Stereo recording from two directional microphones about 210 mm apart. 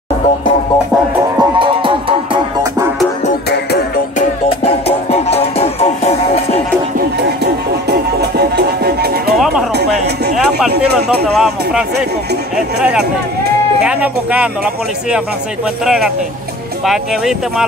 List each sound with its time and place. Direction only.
1.4 s music: 25° right (ahead or behind)
4.5 s music: 30° left (ahead or behind)
8.2 s music: 50° right (ahead or behind)
11.2 s speech: centre (ahead or behind)